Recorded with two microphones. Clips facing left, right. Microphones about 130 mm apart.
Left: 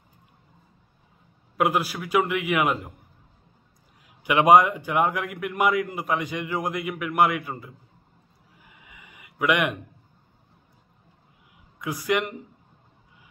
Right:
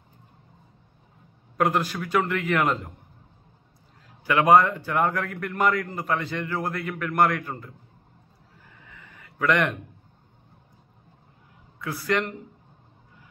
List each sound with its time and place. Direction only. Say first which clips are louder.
1.6 s a man's voice: even; 10° left (ahead or behind)
4.2 s a man's voice: left 1 dB; 15° left (ahead or behind)
8.5 s a sound: right 1 dB; 15° left (ahead or behind)
11.8 s a man's voice: left 1 dB; 15° left (ahead or behind)